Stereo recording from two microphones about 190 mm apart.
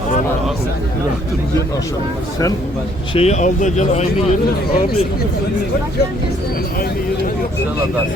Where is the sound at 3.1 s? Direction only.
35° left (ahead or behind).